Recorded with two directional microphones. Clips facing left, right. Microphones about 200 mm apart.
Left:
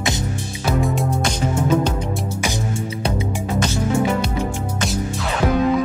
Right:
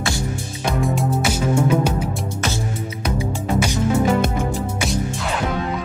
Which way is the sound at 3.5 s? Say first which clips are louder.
Right 1 dB; 10° right (ahead or behind).